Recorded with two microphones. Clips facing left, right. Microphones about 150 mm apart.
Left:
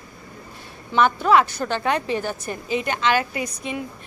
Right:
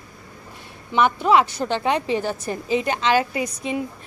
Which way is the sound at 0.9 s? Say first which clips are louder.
Even; 20° right (ahead or behind).